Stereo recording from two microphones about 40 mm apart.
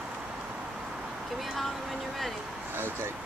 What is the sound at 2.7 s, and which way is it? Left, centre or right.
Speech, right.